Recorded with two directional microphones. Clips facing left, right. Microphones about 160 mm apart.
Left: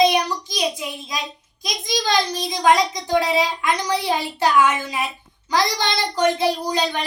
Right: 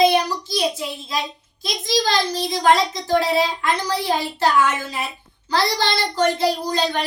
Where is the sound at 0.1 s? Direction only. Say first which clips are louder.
Right 2 dB; 15° left (ahead or behind).